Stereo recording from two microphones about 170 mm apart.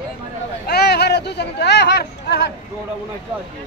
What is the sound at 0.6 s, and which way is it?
Speech, 70° left (ahead or behind).